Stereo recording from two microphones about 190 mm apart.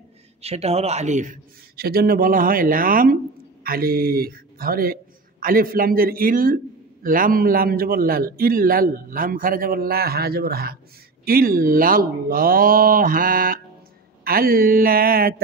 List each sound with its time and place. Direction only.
0.4 s a man's voice: 35° right (ahead or behind); by 15.4 s 50° right (ahead or behind)